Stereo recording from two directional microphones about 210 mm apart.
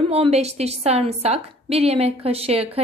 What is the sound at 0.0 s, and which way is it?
A woman's voice, 30° right (ahead or behind).